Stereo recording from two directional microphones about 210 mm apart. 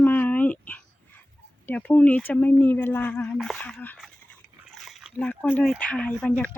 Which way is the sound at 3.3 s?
5° left (ahead or behind).